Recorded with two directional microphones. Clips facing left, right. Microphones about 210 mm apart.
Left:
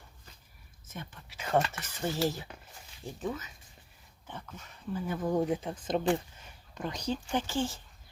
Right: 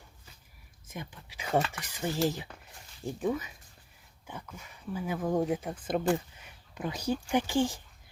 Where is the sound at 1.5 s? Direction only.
Centre (ahead or behind).